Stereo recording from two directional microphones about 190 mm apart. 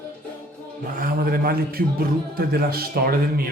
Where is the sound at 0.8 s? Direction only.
50° right (ahead or behind).